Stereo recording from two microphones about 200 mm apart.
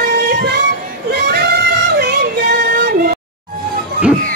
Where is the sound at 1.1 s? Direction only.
55° right (ahead or behind).